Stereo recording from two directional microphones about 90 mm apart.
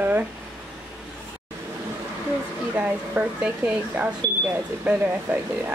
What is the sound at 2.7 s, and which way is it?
Speech, 15° right (ahead or behind).